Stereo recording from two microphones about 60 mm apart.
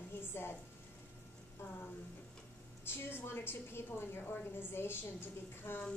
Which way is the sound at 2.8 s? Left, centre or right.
Left.